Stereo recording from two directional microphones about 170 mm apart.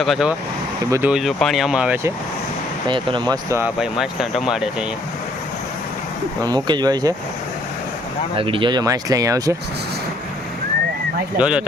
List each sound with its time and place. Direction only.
0.0 s speech: centre (ahead or behind)
0.9 s speech: 15° right (ahead or behind)
1.1 s speech: centre (ahead or behind)
2.8 s speech: 30° right (ahead or behind)
3.6 s speech: 5° right (ahead or behind)
6.4 s speech: 25° right (ahead or behind)
8.4 s speech: 30° right (ahead or behind)
11.3 s speech: 5° right (ahead or behind)